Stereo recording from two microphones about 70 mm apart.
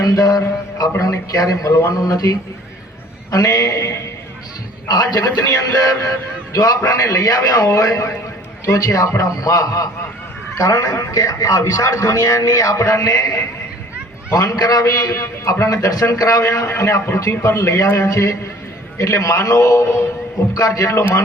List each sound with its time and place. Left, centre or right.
0.0 s a man's voice: left
4.9 s a man's voice: left
6.5 s a man's voice: left
12.7 s a man's voice: left